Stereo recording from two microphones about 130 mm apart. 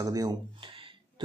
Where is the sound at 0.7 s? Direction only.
40° right (ahead or behind).